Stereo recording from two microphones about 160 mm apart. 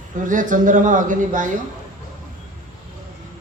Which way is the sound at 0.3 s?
55° right (ahead or behind).